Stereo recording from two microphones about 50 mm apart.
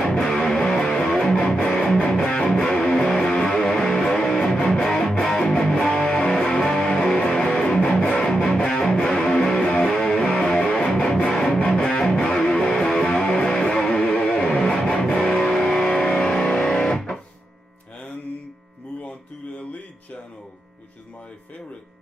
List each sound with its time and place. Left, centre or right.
0.0 s music: centre
14.1 s music: left
14.4 s music: centre